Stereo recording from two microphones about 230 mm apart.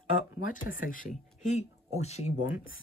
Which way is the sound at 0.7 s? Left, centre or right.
Left.